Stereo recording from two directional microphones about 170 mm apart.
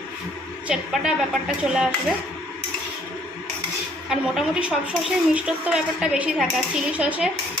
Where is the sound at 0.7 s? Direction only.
5° right (ahead or behind).